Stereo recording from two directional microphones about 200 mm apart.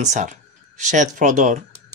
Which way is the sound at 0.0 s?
35° right (ahead or behind).